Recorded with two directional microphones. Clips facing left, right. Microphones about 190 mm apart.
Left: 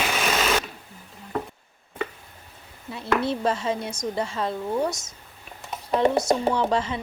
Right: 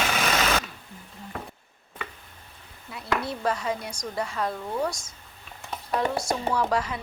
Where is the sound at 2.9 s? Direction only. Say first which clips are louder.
Left 5 dB; 25° left (ahead or behind).